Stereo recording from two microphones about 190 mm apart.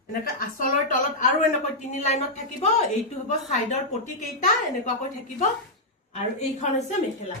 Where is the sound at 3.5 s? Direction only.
35° left (ahead or behind).